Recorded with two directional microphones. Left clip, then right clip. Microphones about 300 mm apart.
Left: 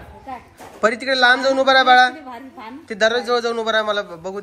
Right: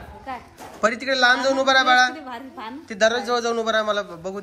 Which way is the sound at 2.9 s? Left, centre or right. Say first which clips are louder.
Left 2 dB; centre.